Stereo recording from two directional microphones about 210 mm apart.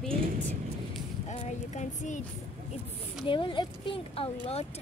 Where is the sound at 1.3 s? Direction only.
35° left (ahead or behind).